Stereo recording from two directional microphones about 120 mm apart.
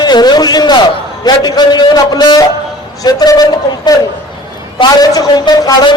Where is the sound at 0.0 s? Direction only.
35° left (ahead or behind).